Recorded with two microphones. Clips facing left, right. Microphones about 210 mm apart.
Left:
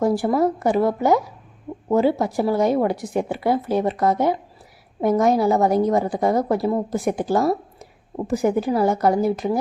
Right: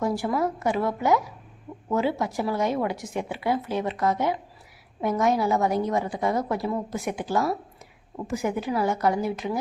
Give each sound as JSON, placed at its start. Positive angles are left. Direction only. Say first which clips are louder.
{"t": 0.0, "sound": "a woman's voice", "louder": "left 6 dB", "side_deg": 35}